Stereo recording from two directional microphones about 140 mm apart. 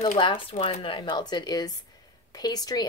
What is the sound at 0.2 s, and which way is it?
A woman's voice, 35° left (ahead or behind).